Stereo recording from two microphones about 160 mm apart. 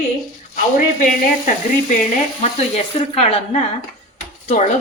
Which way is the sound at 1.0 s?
55° left (ahead or behind).